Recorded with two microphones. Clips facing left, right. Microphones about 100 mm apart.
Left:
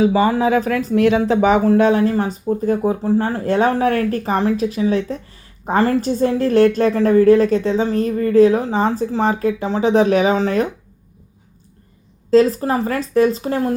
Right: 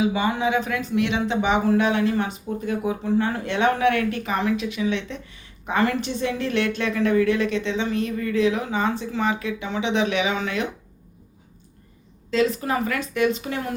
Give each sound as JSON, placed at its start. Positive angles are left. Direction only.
{"t": 0.0, "sound": "speech", "side_deg": 35}
{"t": 12.3, "sound": "speech", "side_deg": 40}